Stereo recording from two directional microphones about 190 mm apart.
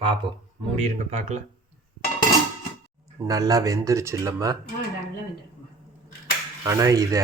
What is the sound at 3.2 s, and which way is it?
Speech, 20° right (ahead or behind).